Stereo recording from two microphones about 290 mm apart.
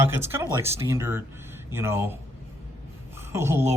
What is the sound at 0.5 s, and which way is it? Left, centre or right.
Speech, right.